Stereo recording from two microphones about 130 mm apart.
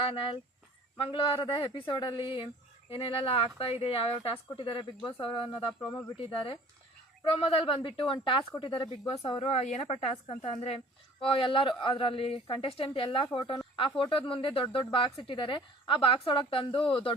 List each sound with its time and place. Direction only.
0.0 s speech: 45° left (ahead or behind)
11.2 s speech: 40° left (ahead or behind)